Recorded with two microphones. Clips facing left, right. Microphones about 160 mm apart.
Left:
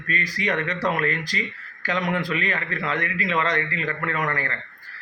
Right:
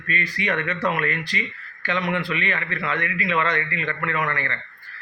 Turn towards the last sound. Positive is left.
turn(degrees=40)  # may be behind; listen again after turning